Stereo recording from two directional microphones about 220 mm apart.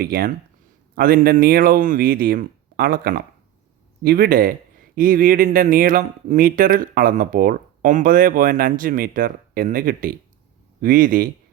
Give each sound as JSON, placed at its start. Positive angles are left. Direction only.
{"t": 0.0, "sound": "speech", "side_deg": -40}